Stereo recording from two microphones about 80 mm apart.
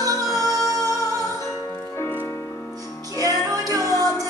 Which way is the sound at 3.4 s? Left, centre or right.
Right.